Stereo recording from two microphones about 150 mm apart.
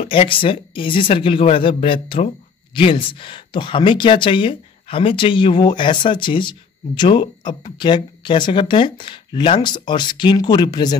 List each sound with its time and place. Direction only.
0.0 s speech: 35° left (ahead or behind)